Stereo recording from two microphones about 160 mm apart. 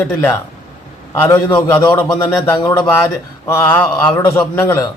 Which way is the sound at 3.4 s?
15° left (ahead or behind).